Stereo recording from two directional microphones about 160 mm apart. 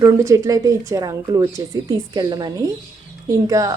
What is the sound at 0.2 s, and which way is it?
Speech, 20° right (ahead or behind).